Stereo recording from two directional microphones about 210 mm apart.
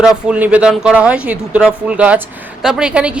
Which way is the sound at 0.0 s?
5° right (ahead or behind).